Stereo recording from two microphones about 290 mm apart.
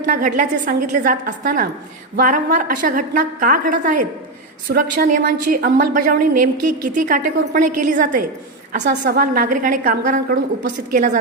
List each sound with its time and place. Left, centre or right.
0.0 s a woman's voice: right
6.3 s a sound: right
6.8 s a woman's voice: right